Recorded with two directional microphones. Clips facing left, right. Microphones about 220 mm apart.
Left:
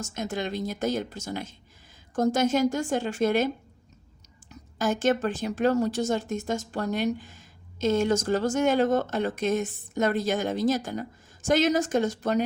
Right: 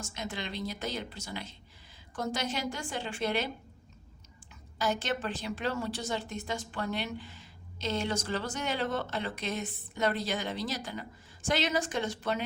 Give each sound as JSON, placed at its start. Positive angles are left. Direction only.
{"t": 0.0, "sound": "speech", "side_deg": 45}
{"t": 4.5, "sound": "speech", "side_deg": 45}